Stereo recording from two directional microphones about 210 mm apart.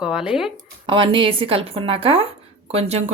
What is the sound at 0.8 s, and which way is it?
Speech, 25° right (ahead or behind).